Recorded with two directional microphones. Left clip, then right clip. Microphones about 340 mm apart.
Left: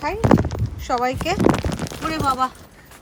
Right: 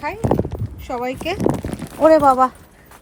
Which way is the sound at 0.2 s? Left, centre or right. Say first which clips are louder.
Left 4 dB; centre.